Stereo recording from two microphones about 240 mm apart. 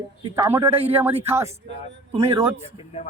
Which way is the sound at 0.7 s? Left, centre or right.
Right.